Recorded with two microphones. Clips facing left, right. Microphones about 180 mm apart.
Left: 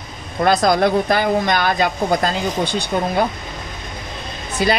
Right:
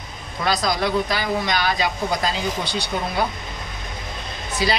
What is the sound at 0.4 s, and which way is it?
Speech, 55° left (ahead or behind).